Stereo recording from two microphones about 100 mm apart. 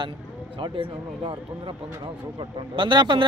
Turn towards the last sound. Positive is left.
turn(degrees=-50)  # may be behind; listen again after turning